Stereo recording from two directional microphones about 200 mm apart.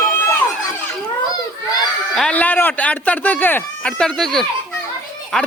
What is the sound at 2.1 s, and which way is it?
Speech, 5° left (ahead or behind).